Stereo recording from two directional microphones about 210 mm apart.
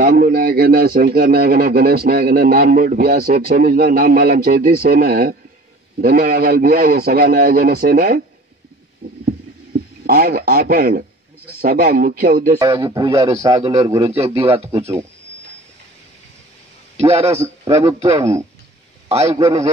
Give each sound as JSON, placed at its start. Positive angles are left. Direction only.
{"t": 0.0, "sound": "a man's voice", "side_deg": -45}
{"t": 10.0, "sound": "a man's voice", "side_deg": -45}
{"t": 12.5, "sound": "a man's voice", "side_deg": -15}
{"t": 13.6, "sound": "a man's voice", "side_deg": -30}
{"t": 13.8, "sound": "a man's voice", "side_deg": -15}
{"t": 14.4, "sound": "a man's voice", "side_deg": -30}
{"t": 17.0, "sound": "a man's voice", "side_deg": -30}
{"t": 17.3, "sound": "a man's voice", "side_deg": -10}
{"t": 19.0, "sound": "a man's voice", "side_deg": -30}